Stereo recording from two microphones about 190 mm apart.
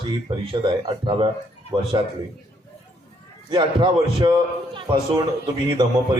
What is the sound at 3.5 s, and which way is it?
A man's voice, 25° right (ahead or behind).